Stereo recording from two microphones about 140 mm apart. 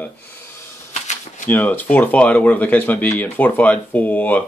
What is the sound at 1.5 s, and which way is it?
Speech, 10° left (ahead or behind).